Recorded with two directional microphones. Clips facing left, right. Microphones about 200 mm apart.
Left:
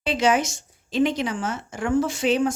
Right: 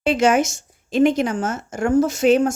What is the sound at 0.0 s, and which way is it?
A woman's voice, 45° right (ahead or behind).